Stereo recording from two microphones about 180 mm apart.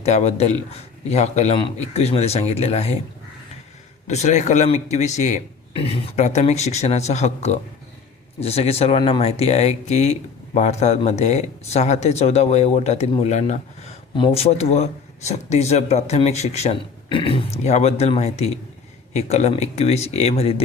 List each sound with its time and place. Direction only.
0.0 s speech: 40° left (ahead or behind)
4.0 s speech: 40° left (ahead or behind)